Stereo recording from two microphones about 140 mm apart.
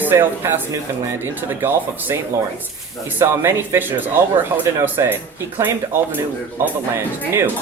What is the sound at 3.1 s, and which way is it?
Speech, 15° right (ahead or behind).